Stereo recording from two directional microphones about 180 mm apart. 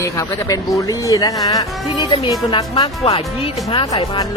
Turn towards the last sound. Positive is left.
turn(degrees=20)  # may be behind; listen again after turning